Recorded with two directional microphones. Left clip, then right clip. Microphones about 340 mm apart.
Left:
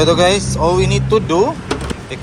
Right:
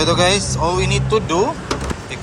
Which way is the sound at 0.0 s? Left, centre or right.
Centre.